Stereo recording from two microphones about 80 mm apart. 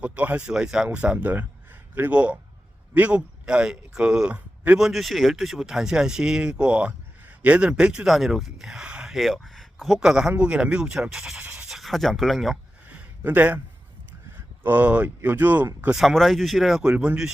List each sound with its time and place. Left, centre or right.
0.0 s speech: centre
12.9 s a sound: centre
14.6 s speech: right
15.9 s speech: centre
16.8 s speech: centre